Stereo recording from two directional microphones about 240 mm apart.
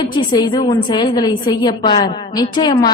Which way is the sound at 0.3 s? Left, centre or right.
Centre.